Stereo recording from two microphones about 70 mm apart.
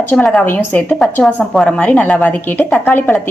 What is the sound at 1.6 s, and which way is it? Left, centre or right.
A woman's voice, centre.